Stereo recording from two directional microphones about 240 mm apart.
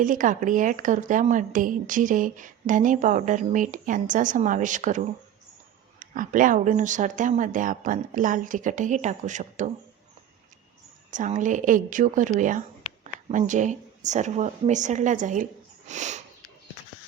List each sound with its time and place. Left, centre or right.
0.0 s speech: right
11.1 s speech: right
15.9 s sniff: right